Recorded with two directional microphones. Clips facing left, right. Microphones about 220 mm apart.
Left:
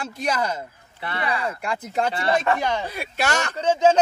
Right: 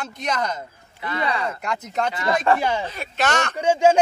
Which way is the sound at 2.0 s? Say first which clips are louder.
Left 1 dB; 30° left (ahead or behind).